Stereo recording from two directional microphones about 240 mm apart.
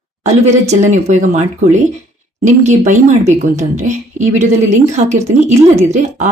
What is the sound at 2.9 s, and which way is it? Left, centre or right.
A woman's voice, right.